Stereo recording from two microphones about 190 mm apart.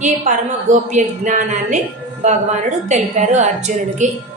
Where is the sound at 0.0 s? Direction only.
40° right (ahead or behind).